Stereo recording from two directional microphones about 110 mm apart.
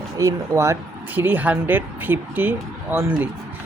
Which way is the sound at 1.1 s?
15° right (ahead or behind).